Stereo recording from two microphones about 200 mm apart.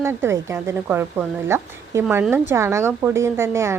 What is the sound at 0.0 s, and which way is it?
Speech, 10° right (ahead or behind).